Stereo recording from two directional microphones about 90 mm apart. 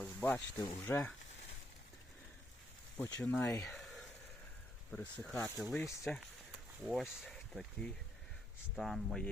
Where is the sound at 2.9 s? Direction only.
25° left (ahead or behind).